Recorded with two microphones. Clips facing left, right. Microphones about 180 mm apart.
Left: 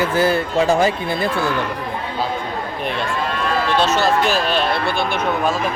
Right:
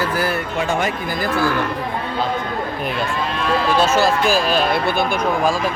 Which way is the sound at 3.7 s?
10° right (ahead or behind).